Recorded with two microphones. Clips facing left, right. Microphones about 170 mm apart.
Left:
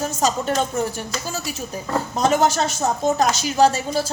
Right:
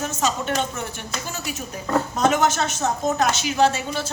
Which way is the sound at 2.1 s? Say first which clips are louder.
Left 3 dB; 35° left (ahead or behind).